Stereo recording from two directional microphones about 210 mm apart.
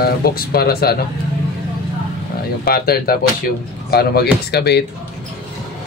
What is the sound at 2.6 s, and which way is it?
Speech, 45° left (ahead or behind).